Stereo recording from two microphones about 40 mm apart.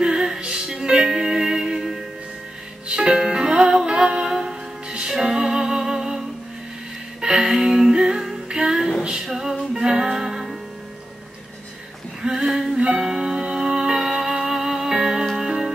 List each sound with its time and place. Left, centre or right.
0.0 s music: centre
2.9 s music: right
9.2 s music: centre
12.2 s a sound: centre
12.7 s music: right